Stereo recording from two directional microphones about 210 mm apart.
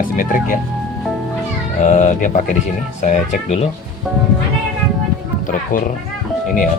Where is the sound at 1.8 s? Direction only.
35° left (ahead or behind).